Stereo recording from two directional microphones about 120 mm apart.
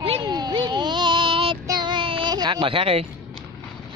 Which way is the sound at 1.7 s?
40° right (ahead or behind).